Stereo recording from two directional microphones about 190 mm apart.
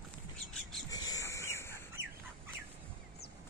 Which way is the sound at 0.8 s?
20° left (ahead or behind).